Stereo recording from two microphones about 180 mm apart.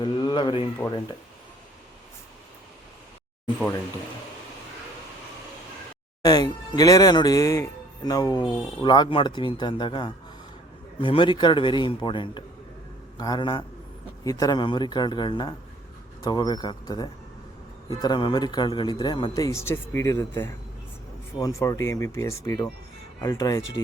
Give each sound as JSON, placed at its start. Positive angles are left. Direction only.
{"t": 0.0, "sound": "speech", "side_deg": 25}
{"t": 6.2, "sound": "speech", "side_deg": 20}